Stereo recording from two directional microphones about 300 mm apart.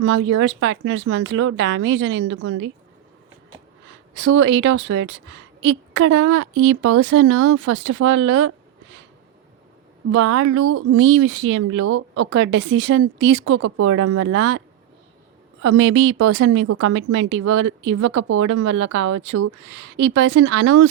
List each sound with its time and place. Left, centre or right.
0.0 s a woman's voice: right
4.1 s a woman's voice: right
10.1 s a woman's voice: right
15.6 s a woman's voice: right